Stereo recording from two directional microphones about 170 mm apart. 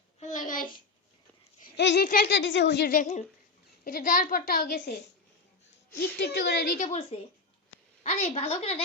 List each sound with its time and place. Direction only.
0.2 s a sound: 50° left (ahead or behind)
1.7 s speech: 90° left
2.0 s speech: 70° left (ahead or behind); by 2.9 s 85° left
2.9 s a woman's voice: 45° left (ahead or behind)
6.0 s a woman's voice: 75° left (ahead or behind)
6.7 s a woman's voice: 40° left (ahead or behind)